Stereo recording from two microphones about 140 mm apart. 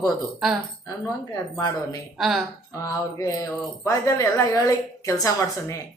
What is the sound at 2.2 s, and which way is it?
Speech, centre (ahead or behind).